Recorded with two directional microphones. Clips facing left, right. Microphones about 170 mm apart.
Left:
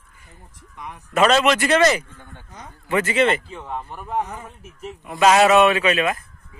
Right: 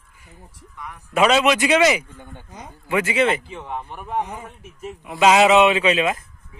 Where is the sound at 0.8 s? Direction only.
20° left (ahead or behind).